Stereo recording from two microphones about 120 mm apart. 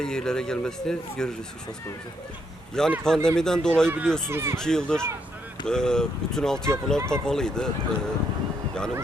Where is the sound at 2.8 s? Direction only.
5° left (ahead or behind).